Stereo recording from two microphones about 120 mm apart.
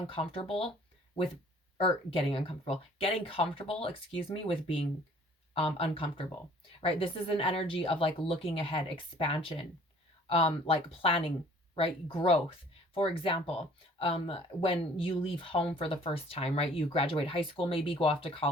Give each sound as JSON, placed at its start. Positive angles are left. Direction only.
{"t": 0.1, "sound": "speech", "side_deg": 50}
{"t": 1.8, "sound": "speech", "side_deg": 50}